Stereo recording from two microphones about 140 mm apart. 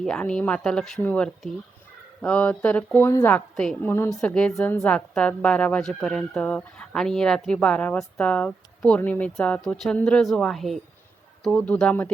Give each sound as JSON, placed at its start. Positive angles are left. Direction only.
{"t": 0.0, "sound": "speech", "side_deg": 5}
{"t": 3.3, "sound": "a woman's voice", "side_deg": 5}
{"t": 3.8, "sound": "a woman's voice", "side_deg": 15}